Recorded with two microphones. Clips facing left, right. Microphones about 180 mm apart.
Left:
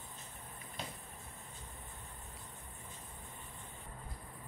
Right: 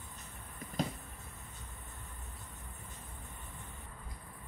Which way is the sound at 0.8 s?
40° right (ahead or behind).